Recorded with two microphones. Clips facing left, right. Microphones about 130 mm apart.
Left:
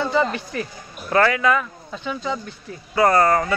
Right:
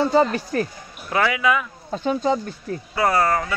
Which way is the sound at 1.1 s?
5° right (ahead or behind).